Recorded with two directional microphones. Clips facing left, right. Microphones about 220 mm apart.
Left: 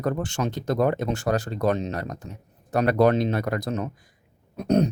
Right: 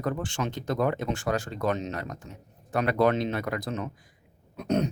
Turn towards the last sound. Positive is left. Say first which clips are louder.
# left 5 dB
turn(degrees=35)  # may be behind; listen again after turning